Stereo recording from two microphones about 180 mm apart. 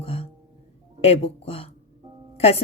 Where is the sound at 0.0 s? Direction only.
35° left (ahead or behind).